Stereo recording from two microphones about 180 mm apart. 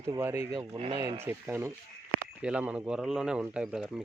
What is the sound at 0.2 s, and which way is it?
Speech, 15° right (ahead or behind).